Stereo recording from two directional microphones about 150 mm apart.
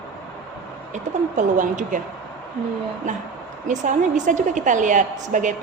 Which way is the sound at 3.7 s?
55° right (ahead or behind).